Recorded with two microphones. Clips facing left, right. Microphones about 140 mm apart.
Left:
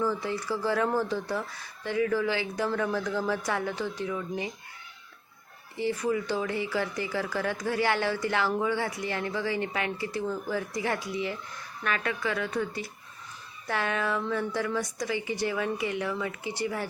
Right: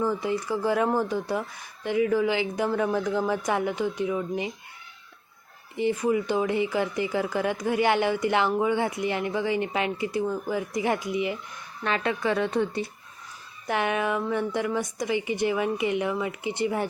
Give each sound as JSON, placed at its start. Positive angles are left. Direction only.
{"t": 0.0, "sound": "speech", "side_deg": -15}
{"t": 5.7, "sound": "speech", "side_deg": -20}